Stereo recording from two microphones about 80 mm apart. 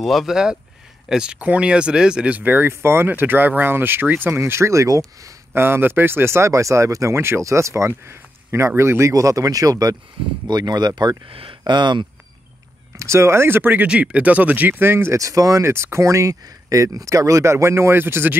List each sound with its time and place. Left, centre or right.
0.0 s speech: centre; by 5.3 s right
5.5 s speech: right
9.1 s speech: right
11.2 s speech: right
12.9 s speech: right
13.8 s speech: centre